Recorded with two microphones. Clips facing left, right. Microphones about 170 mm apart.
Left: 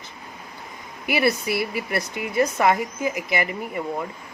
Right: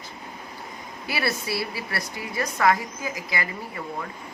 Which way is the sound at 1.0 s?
20° left (ahead or behind).